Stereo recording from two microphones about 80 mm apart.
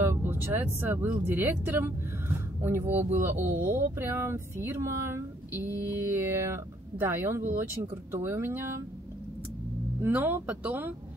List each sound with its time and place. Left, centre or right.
0.0 s a sound: right
0.7 s speech: right
9.9 s speech: right